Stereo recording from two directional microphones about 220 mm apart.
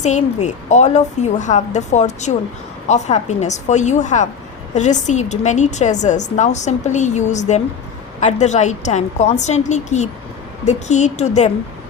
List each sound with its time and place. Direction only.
0.0 s a woman's voice: 30° left (ahead or behind)